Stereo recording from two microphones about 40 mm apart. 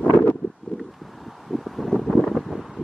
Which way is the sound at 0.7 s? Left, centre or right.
Left.